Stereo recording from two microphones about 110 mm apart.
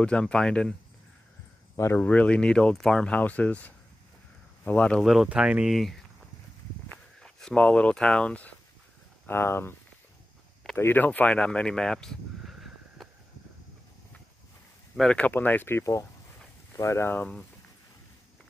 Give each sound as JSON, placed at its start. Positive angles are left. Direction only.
{"t": 0.0, "sound": "speech", "side_deg": 10}
{"t": 1.8, "sound": "speech", "side_deg": 25}
{"t": 2.0, "sound": "speech", "side_deg": 10}
{"t": 5.1, "sound": "speech", "side_deg": -5}
{"t": 10.8, "sound": "speech", "side_deg": 15}
{"t": 15.0, "sound": "speech", "side_deg": 10}